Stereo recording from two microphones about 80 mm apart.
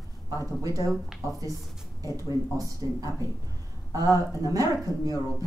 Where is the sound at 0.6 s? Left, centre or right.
Right.